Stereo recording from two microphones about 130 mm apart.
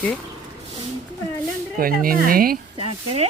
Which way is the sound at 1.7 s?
90° right.